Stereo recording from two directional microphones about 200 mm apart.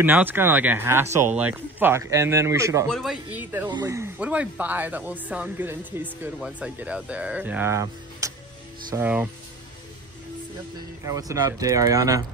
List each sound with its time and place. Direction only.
0.0 s speech: 10° right (ahead or behind)
2.9 s speech: centre (ahead or behind)
3.6 s speech: 20° right (ahead or behind)
11.1 s speech: 15° right (ahead or behind)